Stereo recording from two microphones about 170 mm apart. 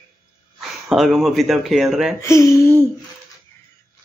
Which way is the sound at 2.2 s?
15° left (ahead or behind).